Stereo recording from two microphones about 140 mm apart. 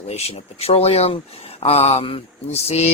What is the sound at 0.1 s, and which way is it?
Speech, 50° left (ahead or behind).